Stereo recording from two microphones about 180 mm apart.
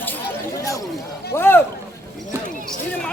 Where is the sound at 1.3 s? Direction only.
10° left (ahead or behind).